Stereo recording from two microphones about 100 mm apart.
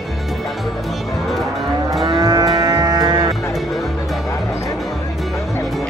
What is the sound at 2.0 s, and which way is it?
Moo, 40° right (ahead or behind).